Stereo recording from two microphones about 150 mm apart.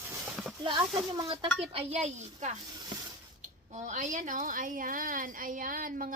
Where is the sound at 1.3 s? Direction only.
40° right (ahead or behind).